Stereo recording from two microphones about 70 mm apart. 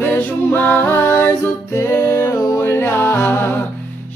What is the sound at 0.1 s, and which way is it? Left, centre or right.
Music, left.